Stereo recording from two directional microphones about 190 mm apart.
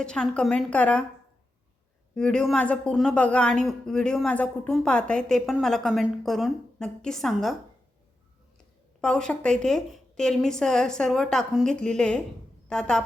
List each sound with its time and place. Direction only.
0.0 s speech: 5° left (ahead or behind)
2.1 s speech: 5° left (ahead or behind)
9.0 s a woman's voice: 5° left (ahead or behind)